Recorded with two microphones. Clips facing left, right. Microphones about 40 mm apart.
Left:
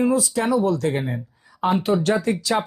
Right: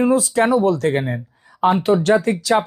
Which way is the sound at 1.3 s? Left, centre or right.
Right.